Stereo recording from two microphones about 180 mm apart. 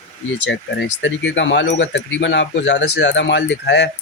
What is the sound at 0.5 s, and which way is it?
Speech, 85° left.